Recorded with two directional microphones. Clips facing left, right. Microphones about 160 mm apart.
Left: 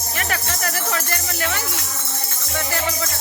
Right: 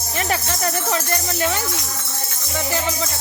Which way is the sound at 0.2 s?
25° right (ahead or behind).